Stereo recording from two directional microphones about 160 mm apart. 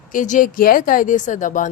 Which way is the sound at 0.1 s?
55° left (ahead or behind).